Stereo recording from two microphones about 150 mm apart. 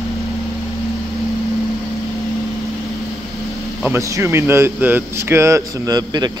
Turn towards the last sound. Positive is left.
turn(degrees=-25)  # may be behind; listen again after turning